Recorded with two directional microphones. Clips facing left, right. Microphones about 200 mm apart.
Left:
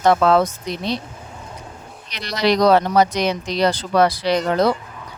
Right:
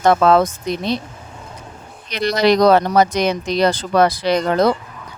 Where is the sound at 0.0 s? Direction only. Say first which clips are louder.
Right 2 dB; 50° right (ahead or behind).